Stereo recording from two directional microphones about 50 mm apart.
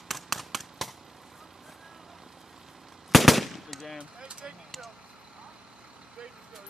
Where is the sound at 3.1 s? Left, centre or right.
Centre.